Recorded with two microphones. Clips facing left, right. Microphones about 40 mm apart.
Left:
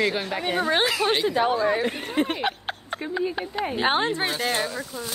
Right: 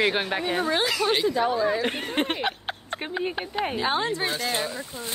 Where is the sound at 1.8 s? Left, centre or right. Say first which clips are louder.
Left 1 dB; right.